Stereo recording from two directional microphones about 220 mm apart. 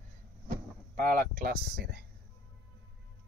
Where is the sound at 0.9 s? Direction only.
40° right (ahead or behind).